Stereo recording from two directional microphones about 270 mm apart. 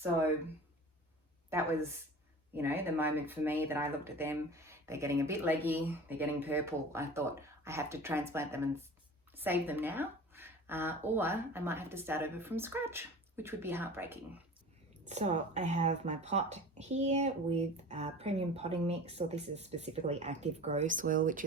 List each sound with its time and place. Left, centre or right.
2.6 s speech: centre
15.0 s speech: right